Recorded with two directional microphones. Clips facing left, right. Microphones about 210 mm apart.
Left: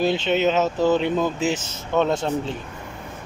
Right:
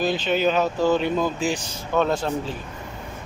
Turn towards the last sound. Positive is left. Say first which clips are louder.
# left 1 dB
turn(degrees=25)  # may be behind; listen again after turning